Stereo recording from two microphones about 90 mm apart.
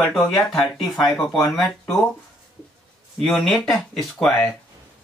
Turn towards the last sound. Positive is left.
turn(degrees=5)  # may be behind; listen again after turning